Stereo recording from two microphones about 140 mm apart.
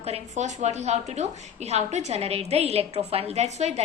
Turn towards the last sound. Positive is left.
turn(degrees=-55)  # may be behind; listen again after turning